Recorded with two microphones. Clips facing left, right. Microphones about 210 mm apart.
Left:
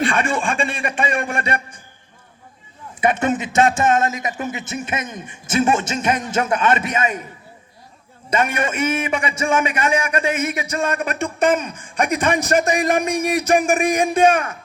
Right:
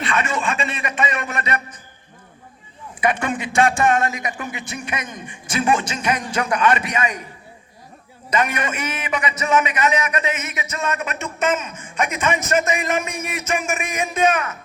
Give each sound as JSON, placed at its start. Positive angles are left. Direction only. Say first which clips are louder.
{"t": 0.1, "sound": "a man's voice", "louder": "left 2 dB", "side_deg": 30}
{"t": 3.0, "sound": "a man's voice", "louder": "left 3 dB", "side_deg": 25}
{"t": 5.0, "sound": "a man's voice", "louder": "left 2 dB", "side_deg": 5}
{"t": 5.7, "sound": "a man's voice", "louder": "left 1 dB", "side_deg": 25}
{"t": 8.3, "sound": "a man's voice", "louder": "left 2 dB", "side_deg": 25}